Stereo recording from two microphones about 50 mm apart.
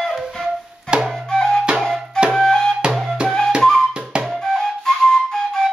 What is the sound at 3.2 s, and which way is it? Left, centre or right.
Music, centre.